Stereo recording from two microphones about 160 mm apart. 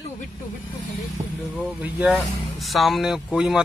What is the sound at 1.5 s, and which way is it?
Speech, 5° right (ahead or behind).